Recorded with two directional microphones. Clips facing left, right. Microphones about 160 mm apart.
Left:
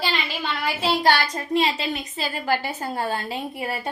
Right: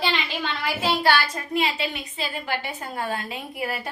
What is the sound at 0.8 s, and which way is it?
A woman's voice, 40° left (ahead or behind).